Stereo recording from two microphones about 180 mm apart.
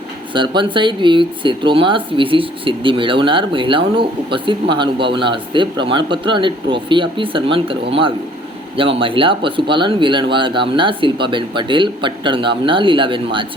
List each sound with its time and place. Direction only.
0.3 s speech: 25° right (ahead or behind)